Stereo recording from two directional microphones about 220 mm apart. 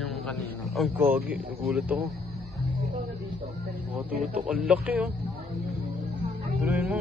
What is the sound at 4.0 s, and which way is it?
Speech, 5° right (ahead or behind).